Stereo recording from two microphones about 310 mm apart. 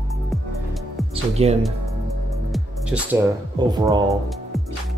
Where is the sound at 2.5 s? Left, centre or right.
Centre.